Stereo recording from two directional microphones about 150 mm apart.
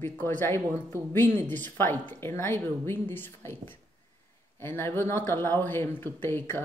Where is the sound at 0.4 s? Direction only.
15° left (ahead or behind).